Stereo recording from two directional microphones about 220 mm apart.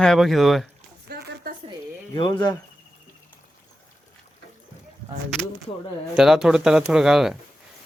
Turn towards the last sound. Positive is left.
turn(degrees=0)  # may be behind; listen again after turning